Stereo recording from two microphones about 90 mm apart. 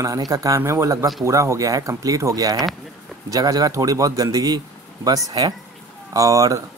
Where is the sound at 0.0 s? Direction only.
40° right (ahead or behind).